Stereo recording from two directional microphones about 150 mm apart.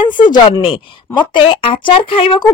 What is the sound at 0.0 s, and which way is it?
Speech, 30° left (ahead or behind).